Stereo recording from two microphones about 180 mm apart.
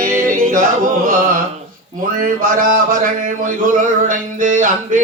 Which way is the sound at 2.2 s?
50° right (ahead or behind).